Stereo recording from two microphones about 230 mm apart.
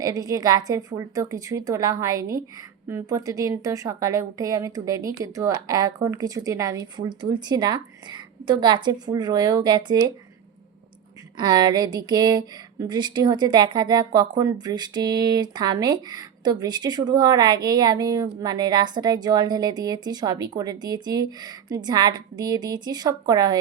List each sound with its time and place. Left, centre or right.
0.0 s a woman's voice: centre
11.3 s a woman's voice: centre